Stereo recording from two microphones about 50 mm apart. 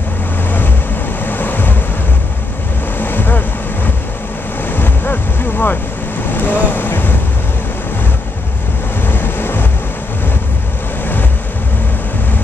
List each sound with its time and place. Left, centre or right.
1.2 s waves: left
3.0 s vehicle: left
4.7 s boat: left
6.3 s vehicle: left
9.1 s vehicle: left